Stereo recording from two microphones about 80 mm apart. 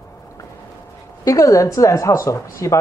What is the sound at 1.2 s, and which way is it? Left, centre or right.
Speech, left.